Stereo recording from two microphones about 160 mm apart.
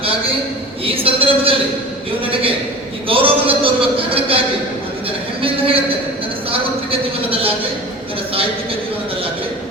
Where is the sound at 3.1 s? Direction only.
35° right (ahead or behind).